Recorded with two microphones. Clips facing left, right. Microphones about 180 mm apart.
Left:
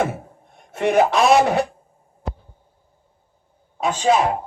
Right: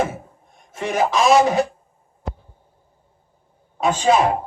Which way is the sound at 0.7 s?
65° left (ahead or behind).